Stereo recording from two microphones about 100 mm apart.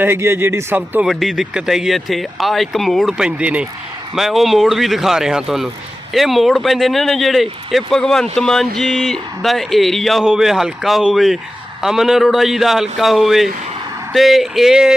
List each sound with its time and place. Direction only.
0.0 s speech: 25° right (ahead or behind)
1.0 s speech: centre (ahead or behind)
3.2 s speech: 10° right (ahead or behind)